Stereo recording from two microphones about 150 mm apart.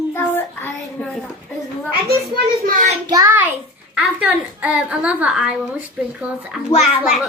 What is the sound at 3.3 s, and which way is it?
A child's voice, 15° right (ahead or behind).